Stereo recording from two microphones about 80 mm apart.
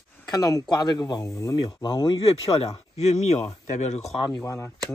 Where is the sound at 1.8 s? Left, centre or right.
Left.